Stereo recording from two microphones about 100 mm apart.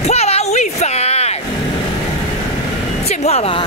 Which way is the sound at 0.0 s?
90° left.